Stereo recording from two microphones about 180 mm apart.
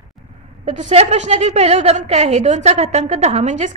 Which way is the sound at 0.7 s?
40° right (ahead or behind).